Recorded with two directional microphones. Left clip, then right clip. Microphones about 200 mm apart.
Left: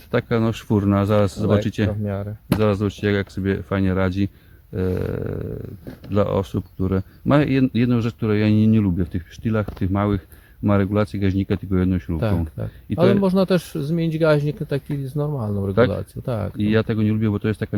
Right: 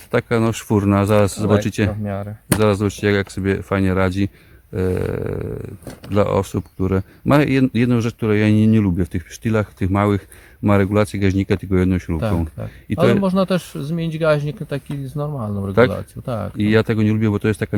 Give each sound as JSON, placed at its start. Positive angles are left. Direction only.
{"t": 0.1, "sound": "speech", "side_deg": -5}
{"t": 1.9, "sound": "speech", "side_deg": 35}
{"t": 2.5, "sound": "speech", "side_deg": -15}
{"t": 12.6, "sound": "speech", "side_deg": 35}
{"t": 16.6, "sound": "speech", "side_deg": -15}